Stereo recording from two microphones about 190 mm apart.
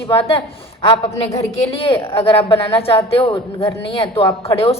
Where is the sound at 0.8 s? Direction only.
25° left (ahead or behind).